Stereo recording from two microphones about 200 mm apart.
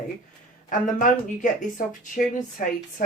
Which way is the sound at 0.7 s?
40° left (ahead or behind).